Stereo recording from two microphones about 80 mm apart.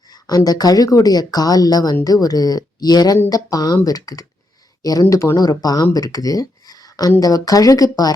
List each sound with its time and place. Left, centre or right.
0.1 s speech: left